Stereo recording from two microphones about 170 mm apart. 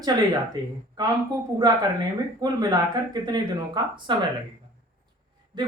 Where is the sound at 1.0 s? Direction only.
20° right (ahead or behind).